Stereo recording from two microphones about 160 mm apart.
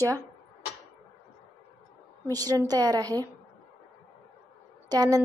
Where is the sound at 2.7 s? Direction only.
25° right (ahead or behind).